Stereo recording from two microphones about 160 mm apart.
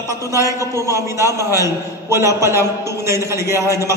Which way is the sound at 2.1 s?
15° right (ahead or behind).